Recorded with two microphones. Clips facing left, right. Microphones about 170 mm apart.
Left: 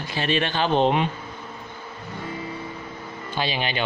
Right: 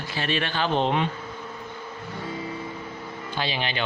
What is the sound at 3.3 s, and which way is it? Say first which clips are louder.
Speech: left 3 dB; 15° left (ahead or behind).